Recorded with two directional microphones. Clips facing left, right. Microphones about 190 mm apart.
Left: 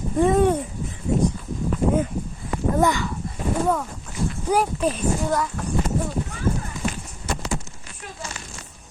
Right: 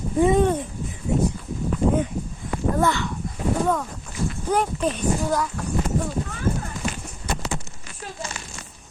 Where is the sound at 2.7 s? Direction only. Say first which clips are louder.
Left 3 dB; 15° left (ahead or behind).